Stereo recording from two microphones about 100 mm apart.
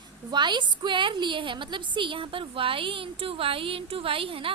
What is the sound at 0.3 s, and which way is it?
A woman's voice, 50° right (ahead or behind).